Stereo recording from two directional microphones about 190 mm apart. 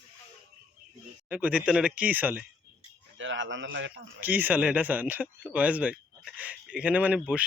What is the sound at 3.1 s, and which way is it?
Speech, 80° right.